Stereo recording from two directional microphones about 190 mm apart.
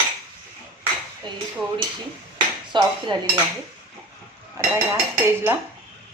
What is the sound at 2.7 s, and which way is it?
Speech, 25° right (ahead or behind).